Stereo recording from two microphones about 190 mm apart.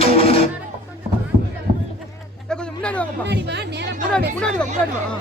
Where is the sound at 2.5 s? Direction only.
5° left (ahead or behind).